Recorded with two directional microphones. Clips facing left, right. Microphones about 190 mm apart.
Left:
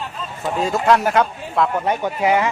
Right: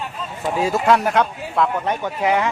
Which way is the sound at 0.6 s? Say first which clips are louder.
Even; 5° right (ahead or behind).